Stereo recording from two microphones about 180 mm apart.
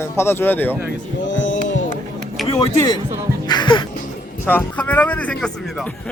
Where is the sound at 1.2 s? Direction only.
90° left.